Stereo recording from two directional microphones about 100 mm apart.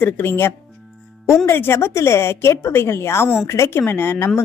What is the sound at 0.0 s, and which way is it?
A woman's voice, 20° left (ahead or behind).